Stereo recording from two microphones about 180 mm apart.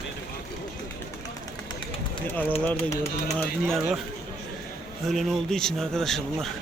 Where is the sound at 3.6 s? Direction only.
Centre (ahead or behind).